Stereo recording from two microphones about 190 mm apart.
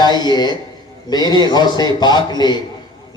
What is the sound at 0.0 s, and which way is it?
A man's voice, 20° left (ahead or behind).